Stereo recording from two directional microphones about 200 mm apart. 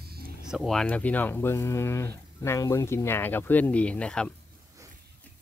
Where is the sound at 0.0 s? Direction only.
50° right (ahead or behind).